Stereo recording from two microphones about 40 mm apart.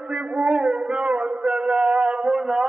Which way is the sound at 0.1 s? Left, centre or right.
Right.